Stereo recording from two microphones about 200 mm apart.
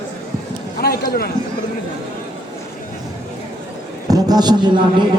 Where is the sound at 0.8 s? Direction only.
50° left (ahead or behind).